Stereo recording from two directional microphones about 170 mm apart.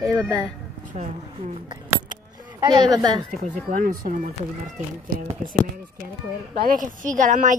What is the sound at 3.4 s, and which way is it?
Speech, 50° right (ahead or behind).